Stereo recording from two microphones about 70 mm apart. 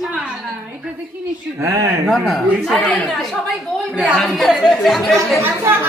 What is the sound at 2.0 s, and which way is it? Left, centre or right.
Speech, centre.